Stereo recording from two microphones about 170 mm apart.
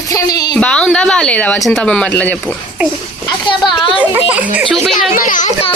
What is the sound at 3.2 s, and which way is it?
Speech, 25° left (ahead or behind).